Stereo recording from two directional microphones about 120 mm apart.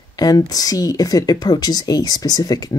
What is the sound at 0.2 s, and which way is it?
Speech, 30° left (ahead or behind).